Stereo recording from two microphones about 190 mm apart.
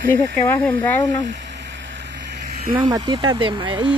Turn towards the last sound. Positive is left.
turn(degrees=-25)  # may be behind; listen again after turning